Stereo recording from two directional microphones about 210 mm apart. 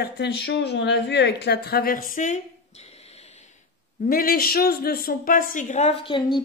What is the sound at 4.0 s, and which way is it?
Speech, 45° left (ahead or behind).